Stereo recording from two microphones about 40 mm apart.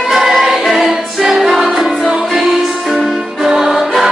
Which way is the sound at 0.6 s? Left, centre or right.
Centre.